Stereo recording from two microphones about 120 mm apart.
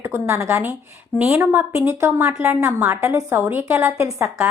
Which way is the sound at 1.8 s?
20° right (ahead or behind).